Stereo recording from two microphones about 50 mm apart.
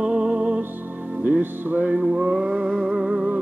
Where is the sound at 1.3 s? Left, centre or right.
Right.